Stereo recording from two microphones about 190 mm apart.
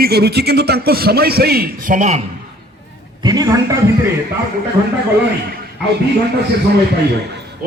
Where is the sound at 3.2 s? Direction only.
20° right (ahead or behind).